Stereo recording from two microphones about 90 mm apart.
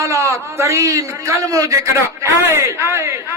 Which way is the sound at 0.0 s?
35° right (ahead or behind).